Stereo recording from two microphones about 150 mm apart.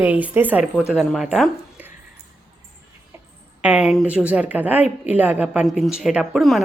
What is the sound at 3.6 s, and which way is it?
A woman's voice, 5° right (ahead or behind).